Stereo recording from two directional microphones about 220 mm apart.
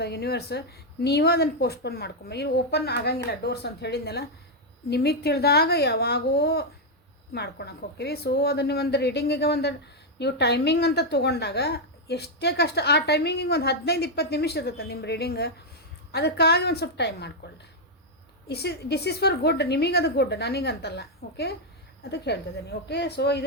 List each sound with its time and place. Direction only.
0.0 s a woman's voice: 45° left (ahead or behind)
18.4 s a woman's voice: 45° left (ahead or behind)